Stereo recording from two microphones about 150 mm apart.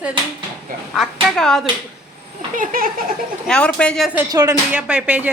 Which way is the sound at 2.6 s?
70° right (ahead or behind).